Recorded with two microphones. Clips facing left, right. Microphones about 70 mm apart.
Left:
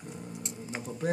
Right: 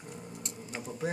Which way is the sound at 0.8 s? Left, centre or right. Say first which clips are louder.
Even; centre.